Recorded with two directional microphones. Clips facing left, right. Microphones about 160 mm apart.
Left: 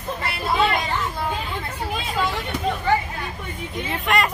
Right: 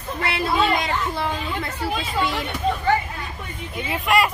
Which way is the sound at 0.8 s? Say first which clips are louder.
Right 1 dB; 85° right.